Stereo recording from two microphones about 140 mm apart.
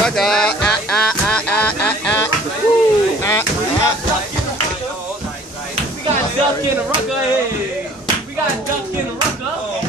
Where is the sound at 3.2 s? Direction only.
20° left (ahead or behind).